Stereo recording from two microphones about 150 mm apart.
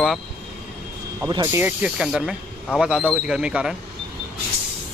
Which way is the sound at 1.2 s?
20° right (ahead or behind).